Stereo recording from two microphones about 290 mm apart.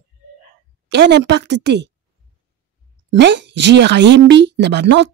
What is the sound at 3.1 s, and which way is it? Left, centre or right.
A woman's voice, right.